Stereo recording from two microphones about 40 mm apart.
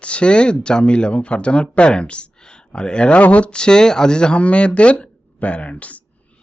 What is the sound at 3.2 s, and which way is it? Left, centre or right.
Speech, left.